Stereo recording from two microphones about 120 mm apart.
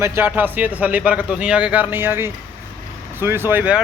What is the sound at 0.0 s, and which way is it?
Speech, 20° right (ahead or behind).